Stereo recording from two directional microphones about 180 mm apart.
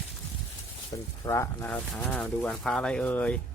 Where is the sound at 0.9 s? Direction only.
20° left (ahead or behind).